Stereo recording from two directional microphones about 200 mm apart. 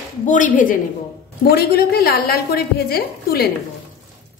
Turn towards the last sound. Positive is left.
turn(degrees=50)  # may be behind; listen again after turning